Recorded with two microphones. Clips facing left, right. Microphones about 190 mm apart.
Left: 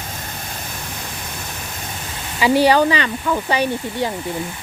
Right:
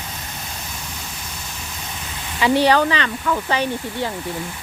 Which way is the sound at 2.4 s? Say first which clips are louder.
Left 2 dB; 10° left (ahead or behind).